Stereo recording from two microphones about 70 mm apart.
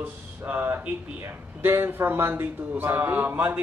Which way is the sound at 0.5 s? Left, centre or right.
Right.